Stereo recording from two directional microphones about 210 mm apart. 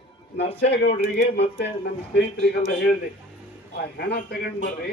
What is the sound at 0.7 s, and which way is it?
A man's voice, 55° left (ahead or behind).